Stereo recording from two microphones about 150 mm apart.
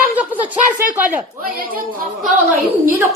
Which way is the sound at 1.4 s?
75° right (ahead or behind).